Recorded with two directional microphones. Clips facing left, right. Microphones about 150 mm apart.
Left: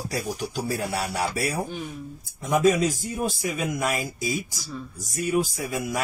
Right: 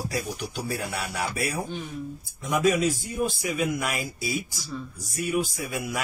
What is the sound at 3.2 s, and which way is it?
A man's voice, 40° left (ahead or behind).